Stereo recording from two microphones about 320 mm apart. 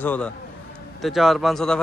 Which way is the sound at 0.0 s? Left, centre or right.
Centre.